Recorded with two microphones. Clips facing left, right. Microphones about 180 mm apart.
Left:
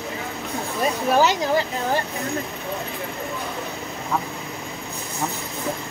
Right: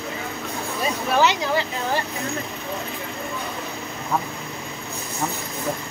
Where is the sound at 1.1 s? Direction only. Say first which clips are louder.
Left 1 dB; 45° left (ahead or behind).